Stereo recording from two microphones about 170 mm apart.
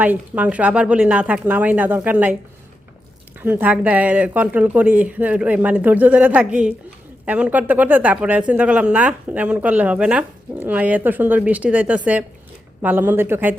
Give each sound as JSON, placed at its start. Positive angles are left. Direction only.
{"t": 0.0, "sound": "speech", "side_deg": -10}
{"t": 3.4, "sound": "speech", "side_deg": -10}